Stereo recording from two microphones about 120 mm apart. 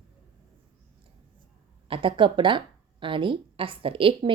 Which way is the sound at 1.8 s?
45° right (ahead or behind).